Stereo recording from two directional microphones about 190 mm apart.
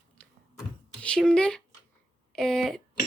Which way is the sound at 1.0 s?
5° left (ahead or behind).